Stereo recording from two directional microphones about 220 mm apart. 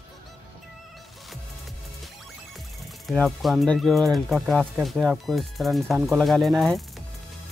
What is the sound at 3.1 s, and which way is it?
Speech, centre (ahead or behind).